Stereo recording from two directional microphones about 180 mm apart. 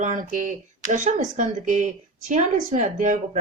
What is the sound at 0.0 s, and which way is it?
Speech, 45° right (ahead or behind).